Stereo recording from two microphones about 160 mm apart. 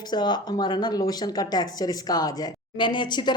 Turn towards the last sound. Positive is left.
turn(degrees=30)  # may be behind; listen again after turning